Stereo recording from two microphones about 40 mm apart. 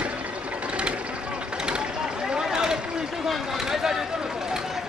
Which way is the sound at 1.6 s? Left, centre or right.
Right.